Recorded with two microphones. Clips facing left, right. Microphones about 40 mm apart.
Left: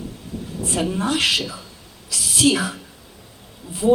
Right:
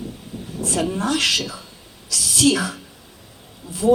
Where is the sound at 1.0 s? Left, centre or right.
Left.